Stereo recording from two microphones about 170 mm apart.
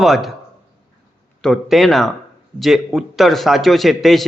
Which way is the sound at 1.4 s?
Centre (ahead or behind).